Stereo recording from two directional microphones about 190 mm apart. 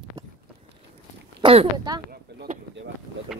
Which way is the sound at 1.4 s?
30° right (ahead or behind).